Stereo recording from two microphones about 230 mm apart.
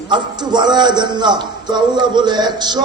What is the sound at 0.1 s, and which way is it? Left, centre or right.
A man's voice, centre.